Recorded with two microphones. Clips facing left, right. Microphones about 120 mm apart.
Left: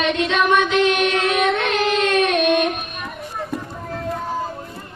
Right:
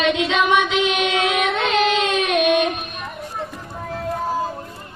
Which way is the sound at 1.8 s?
90° right.